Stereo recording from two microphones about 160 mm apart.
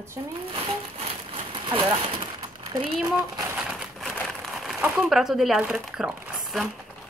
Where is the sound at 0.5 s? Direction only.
35° right (ahead or behind).